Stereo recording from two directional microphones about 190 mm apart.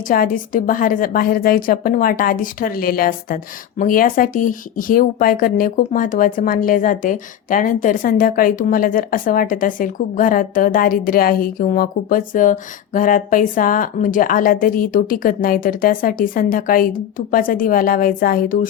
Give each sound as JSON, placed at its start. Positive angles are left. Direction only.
{"t": 0.1, "sound": "a woman's voice", "side_deg": 45}